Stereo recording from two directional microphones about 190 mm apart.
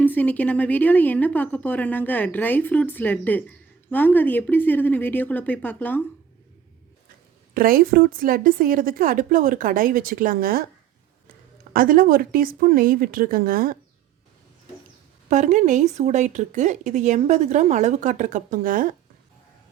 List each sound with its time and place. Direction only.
0.0 s a woman's voice: 10° left (ahead or behind)
7.5 s a woman's voice: 50° right (ahead or behind)
11.7 s a woman's voice: 50° right (ahead or behind)
15.3 s speech: 40° right (ahead or behind)